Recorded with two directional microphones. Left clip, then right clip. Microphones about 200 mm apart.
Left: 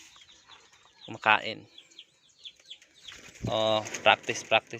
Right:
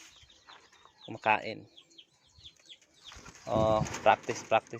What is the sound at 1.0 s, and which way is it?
Speech, centre (ahead or behind).